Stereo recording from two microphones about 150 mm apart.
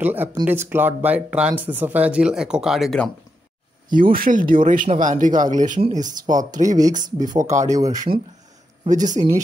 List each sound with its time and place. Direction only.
0.0 s speech: 10° right (ahead or behind)
3.9 s speech: 70° right (ahead or behind)
6.2 s speech: 25° right (ahead or behind)
6.9 s speech: 60° right (ahead or behind)
7.6 s speech: 20° right (ahead or behind)
8.8 s speech: 55° right (ahead or behind)